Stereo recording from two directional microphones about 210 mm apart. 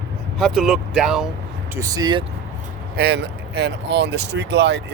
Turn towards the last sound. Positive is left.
turn(degrees=-55)  # may be behind; listen again after turning